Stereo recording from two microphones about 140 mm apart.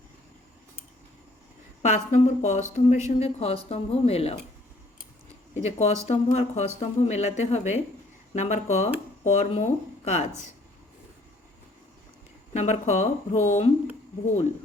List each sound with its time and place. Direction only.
1.8 s speech: 55° left (ahead or behind)
5.5 s speech: 50° left (ahead or behind)
12.5 s speech: 55° left (ahead or behind)